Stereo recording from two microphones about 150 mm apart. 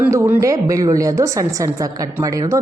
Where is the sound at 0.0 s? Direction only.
15° right (ahead or behind).